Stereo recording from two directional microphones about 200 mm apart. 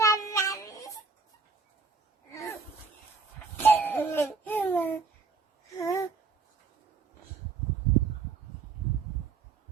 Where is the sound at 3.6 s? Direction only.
10° left (ahead or behind).